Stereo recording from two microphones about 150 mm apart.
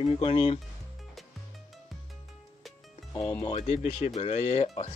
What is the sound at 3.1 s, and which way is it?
Speech, 25° left (ahead or behind).